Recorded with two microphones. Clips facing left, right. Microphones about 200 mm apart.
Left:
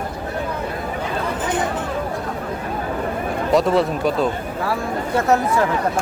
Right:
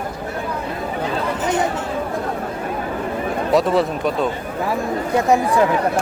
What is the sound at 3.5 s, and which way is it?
Speech, centre (ahead or behind).